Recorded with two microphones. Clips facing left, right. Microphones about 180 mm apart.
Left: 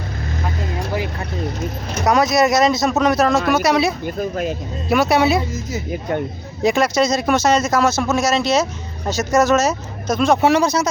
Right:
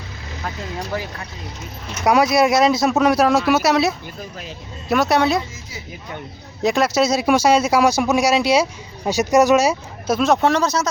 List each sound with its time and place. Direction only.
2.0 s speech: 10° right (ahead or behind)
4.0 s speech: 55° left (ahead or behind)
4.9 s speech: centre (ahead or behind)
5.7 s speech: 50° left (ahead or behind)
6.6 s speech: centre (ahead or behind)